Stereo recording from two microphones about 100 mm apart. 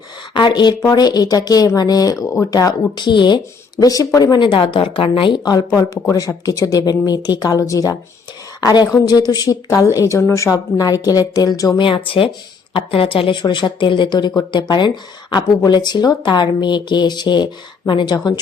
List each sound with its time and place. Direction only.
0.3 s a woman's voice: 50° left (ahead or behind)
5.5 s a woman's voice: 35° left (ahead or behind)
11.8 s speech: 60° left (ahead or behind); by 18.3 s 40° left (ahead or behind)